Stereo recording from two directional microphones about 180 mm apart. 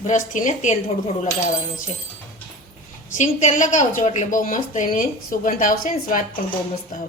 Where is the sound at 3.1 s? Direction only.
40° left (ahead or behind).